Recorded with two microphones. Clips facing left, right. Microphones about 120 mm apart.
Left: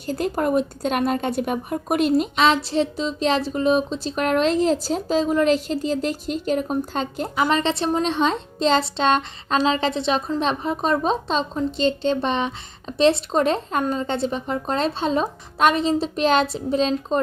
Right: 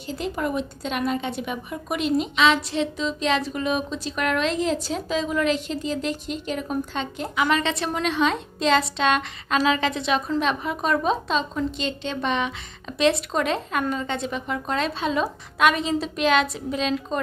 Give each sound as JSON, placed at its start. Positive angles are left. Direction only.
{"t": 0.0, "sound": "speech", "side_deg": 45}